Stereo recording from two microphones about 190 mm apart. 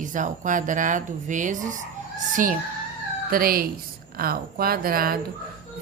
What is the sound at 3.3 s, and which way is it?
A woman's voice, 50° right (ahead or behind).